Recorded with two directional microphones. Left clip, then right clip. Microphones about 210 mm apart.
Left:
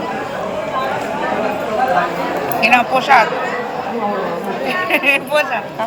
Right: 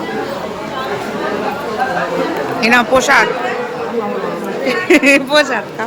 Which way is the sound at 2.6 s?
25° right (ahead or behind).